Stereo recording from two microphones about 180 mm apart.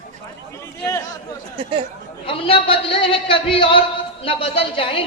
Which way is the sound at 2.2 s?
30° left (ahead or behind).